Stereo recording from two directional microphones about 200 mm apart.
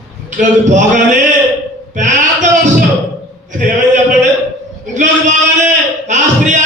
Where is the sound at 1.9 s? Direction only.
40° right (ahead or behind).